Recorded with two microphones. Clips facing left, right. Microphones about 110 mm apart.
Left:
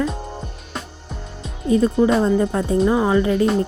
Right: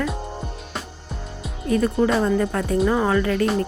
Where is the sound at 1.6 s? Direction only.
20° left (ahead or behind).